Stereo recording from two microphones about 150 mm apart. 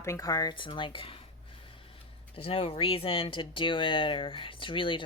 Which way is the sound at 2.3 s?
40° left (ahead or behind).